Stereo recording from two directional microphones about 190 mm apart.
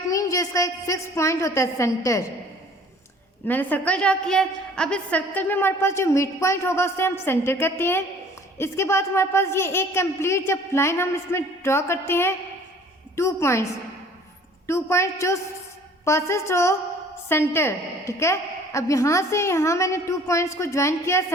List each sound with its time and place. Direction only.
0.1 s a woman's voice: 20° left (ahead or behind)
3.4 s a woman's voice: 10° left (ahead or behind)
14.7 s a woman's voice: 15° left (ahead or behind)